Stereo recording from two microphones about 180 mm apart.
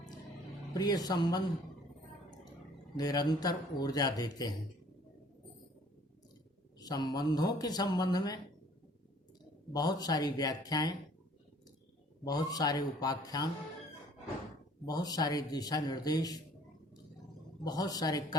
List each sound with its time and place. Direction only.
0.7 s speech: 20° left (ahead or behind)
2.9 s speech: 20° left (ahead or behind)
6.7 s speech: 20° left (ahead or behind)
9.7 s speech: 20° left (ahead or behind)
12.2 s speech: 20° left (ahead or behind)
14.8 s speech: 20° left (ahead or behind)
17.6 s speech: 20° left (ahead or behind)